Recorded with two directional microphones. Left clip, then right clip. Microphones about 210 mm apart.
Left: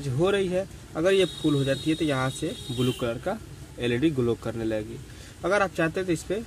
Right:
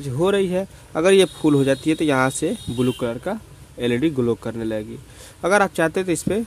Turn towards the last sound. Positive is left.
turn(degrees=-40)  # may be behind; listen again after turning